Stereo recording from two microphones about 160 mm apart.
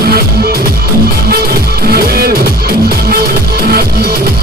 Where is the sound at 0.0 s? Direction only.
75° right (ahead or behind).